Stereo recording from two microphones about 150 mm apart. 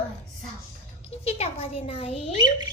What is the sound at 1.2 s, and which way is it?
A woman's voice, 45° left (ahead or behind).